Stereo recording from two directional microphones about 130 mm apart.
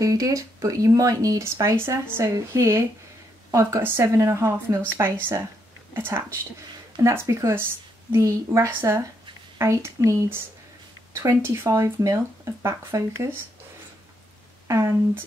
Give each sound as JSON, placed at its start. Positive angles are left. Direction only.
{"t": 0.0, "sound": "speech", "side_deg": -25}
{"t": 14.7, "sound": "speech", "side_deg": -20}